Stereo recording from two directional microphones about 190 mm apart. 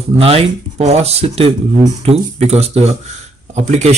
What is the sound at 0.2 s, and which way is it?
Speech, 30° right (ahead or behind).